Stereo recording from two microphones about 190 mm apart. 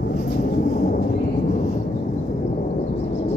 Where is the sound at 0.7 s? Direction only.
40° left (ahead or behind).